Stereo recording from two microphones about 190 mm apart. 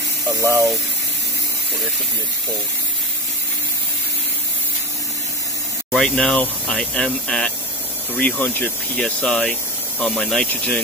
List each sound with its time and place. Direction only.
0.4 s speech: 15° right (ahead or behind)
5.9 s speech: 5° left (ahead or behind)